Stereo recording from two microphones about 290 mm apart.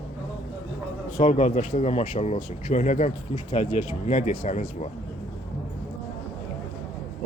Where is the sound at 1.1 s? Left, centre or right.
Left.